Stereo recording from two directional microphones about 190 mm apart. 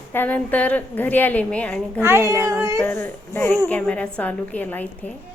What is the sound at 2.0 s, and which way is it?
Speech, 15° right (ahead or behind).